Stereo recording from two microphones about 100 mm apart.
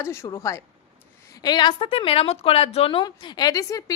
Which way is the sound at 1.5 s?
45° left (ahead or behind).